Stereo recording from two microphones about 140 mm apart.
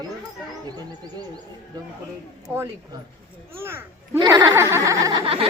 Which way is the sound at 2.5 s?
20° right (ahead or behind).